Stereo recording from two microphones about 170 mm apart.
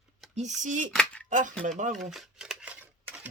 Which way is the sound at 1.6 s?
50° right (ahead or behind).